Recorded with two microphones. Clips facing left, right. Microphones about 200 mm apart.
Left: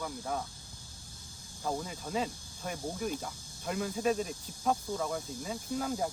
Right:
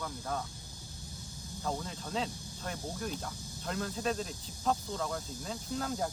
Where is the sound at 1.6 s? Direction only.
10° left (ahead or behind).